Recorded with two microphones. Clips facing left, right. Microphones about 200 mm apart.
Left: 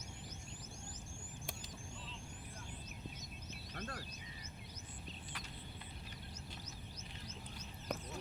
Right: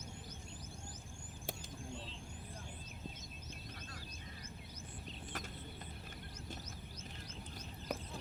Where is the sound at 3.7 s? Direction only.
55° left (ahead or behind).